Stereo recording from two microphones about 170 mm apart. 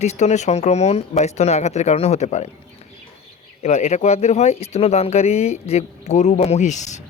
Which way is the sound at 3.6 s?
40° left (ahead or behind).